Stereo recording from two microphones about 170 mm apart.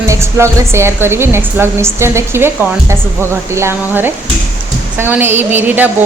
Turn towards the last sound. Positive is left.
turn(degrees=-10)  # may be behind; listen again after turning